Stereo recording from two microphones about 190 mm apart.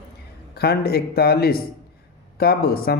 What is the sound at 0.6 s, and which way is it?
A man's voice, 55° left (ahead or behind).